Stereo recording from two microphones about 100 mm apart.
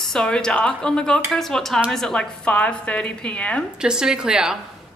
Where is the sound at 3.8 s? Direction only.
5° right (ahead or behind).